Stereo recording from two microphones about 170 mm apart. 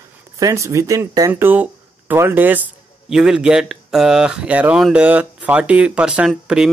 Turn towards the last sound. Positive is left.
turn(degrees=-5)  # may be behind; listen again after turning